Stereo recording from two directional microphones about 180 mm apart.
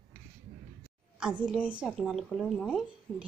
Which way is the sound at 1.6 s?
5° right (ahead or behind).